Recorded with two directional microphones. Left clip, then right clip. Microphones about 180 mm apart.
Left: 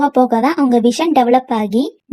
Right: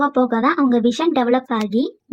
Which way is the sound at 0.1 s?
40° left (ahead or behind).